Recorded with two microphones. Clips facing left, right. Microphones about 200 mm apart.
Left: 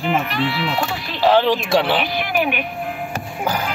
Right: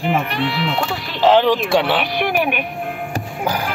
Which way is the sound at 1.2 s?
15° right (ahead or behind).